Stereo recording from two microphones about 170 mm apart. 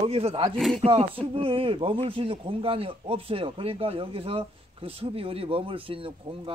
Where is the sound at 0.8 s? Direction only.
35° right (ahead or behind).